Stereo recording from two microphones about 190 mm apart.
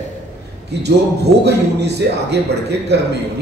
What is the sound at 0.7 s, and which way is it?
A man's voice, 60° right (ahead or behind).